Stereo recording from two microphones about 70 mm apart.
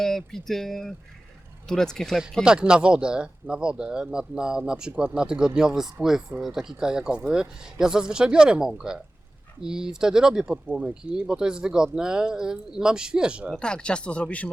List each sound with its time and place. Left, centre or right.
0.0 s speech: centre
2.4 s speech: centre
13.6 s speech: centre